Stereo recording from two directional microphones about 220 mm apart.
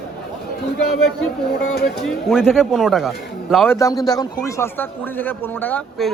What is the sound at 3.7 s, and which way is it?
A man's voice, 15° left (ahead or behind).